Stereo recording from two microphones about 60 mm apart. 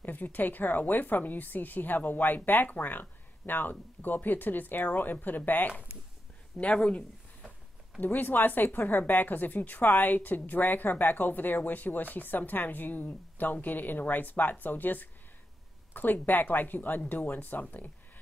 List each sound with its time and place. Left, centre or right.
0.0 s a woman's voice: left
6.8 s speech: centre
8.0 s a woman's voice: left